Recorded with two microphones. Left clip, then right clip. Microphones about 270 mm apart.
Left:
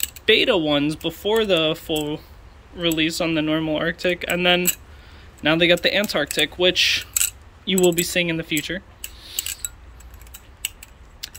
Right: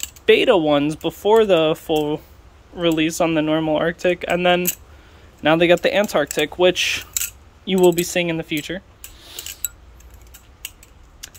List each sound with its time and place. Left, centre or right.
0.0 s speech: centre